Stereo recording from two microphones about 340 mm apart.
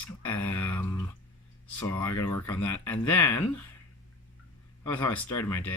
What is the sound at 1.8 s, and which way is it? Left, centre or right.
Speech, centre.